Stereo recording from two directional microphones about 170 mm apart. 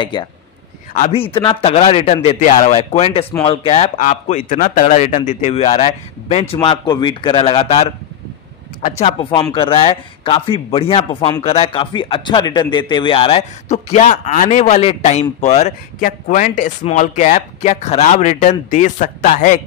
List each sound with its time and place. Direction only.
0.9 s speech: 35° left (ahead or behind)
4.5 s speech: 55° left (ahead or behind)
6.5 s speech: 30° left (ahead or behind)
8.8 s speech: 40° left (ahead or behind)